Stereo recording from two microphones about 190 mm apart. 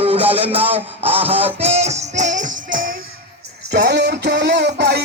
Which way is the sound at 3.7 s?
65° right (ahead or behind).